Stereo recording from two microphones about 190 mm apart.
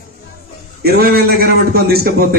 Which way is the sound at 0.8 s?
55° right (ahead or behind).